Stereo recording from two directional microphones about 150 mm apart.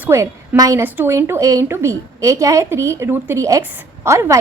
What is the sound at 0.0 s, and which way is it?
A woman's voice, 20° right (ahead or behind).